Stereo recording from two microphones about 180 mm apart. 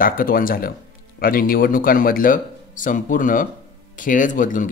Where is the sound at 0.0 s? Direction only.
50° left (ahead or behind).